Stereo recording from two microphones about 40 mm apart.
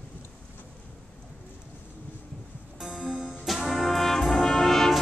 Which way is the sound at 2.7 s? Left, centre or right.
Centre.